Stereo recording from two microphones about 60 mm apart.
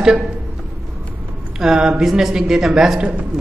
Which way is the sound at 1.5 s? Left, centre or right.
Centre.